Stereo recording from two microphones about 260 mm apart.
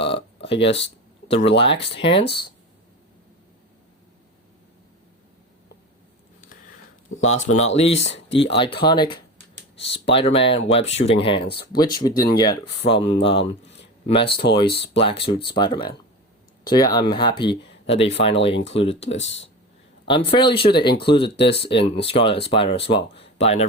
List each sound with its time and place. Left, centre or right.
0.0 s a sound: left
1.3 s speech: left
2.1 s speech: left
7.2 s speech: left
7.9 s speech: left
8.3 s speech: left
13.7 s a sound: left
14.5 s speech: centre
19.2 s speech: left
20.1 s speech: centre